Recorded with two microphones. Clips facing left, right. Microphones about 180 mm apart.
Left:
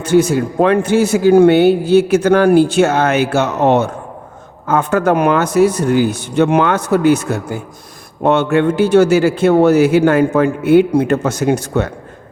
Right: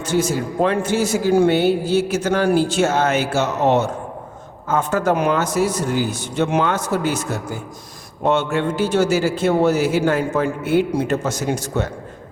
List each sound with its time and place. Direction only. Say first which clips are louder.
0.0 s a man's voice: left 7 dB; 60° left (ahead or behind)